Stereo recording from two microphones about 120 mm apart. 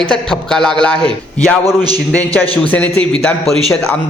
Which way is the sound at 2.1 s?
15° left (ahead or behind).